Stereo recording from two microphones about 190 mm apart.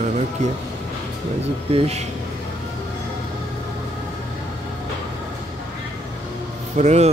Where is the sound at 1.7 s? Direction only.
35° right (ahead or behind).